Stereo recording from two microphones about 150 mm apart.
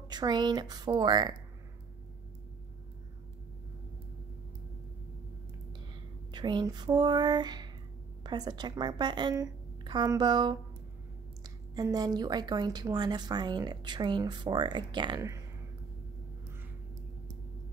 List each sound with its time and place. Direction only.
0.1 s a woman's voice: 30° right (ahead or behind)
6.3 s a woman's voice: 30° right (ahead or behind)